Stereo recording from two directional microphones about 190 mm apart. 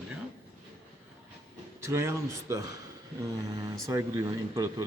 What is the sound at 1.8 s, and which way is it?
Speech, 15° right (ahead or behind).